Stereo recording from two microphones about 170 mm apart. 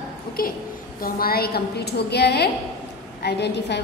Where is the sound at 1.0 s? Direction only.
65° left (ahead or behind).